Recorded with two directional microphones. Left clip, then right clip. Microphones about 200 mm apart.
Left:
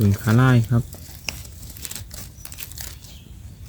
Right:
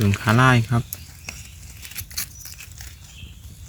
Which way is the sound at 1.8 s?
70° left (ahead or behind).